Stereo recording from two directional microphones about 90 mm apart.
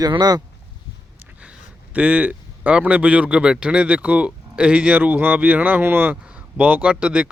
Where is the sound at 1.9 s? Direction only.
15° right (ahead or behind).